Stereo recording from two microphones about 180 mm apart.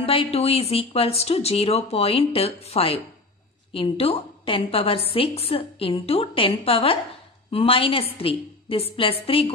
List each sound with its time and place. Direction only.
0.0 s a woman's voice: 30° left (ahead or behind)